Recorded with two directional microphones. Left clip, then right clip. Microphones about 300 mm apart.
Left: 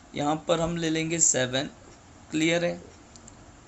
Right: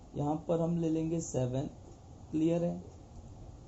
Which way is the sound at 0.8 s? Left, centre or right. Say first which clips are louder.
Left 7 dB; left.